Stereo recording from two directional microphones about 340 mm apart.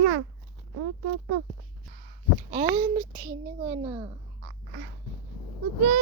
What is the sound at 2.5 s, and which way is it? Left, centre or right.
A child's voice, centre.